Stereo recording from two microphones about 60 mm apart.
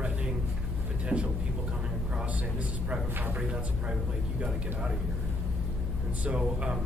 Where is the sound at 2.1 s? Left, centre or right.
Right.